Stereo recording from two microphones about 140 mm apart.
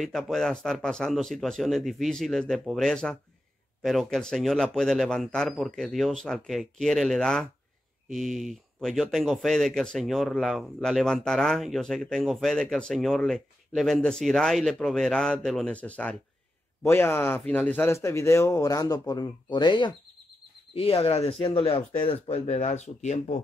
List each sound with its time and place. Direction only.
0.0 s speech: centre (ahead or behind); by 23.4 s 55° left (ahead or behind)